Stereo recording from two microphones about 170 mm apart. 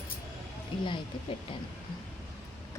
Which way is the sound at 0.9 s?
30° left (ahead or behind).